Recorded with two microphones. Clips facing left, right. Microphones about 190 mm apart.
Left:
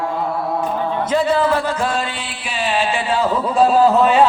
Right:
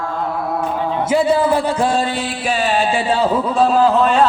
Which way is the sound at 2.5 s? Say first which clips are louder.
Right 2 dB; 45° right (ahead or behind).